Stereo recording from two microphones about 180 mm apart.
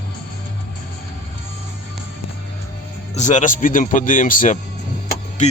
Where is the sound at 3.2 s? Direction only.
40° left (ahead or behind).